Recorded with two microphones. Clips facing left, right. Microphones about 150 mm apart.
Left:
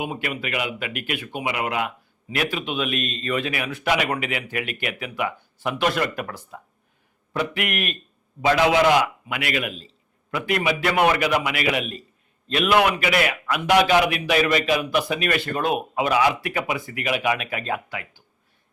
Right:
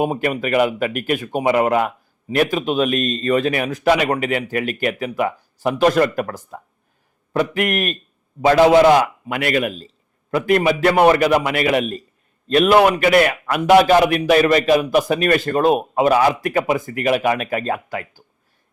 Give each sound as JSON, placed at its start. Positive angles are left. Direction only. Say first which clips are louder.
{"t": 0.0, "sound": "a man's voice", "louder": "right 9 dB", "side_deg": -45}